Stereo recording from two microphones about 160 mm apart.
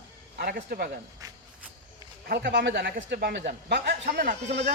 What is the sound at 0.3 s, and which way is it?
Speech, 70° right (ahead or behind).